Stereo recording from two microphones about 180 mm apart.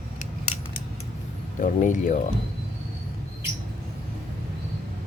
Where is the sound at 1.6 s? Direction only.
45° left (ahead or behind).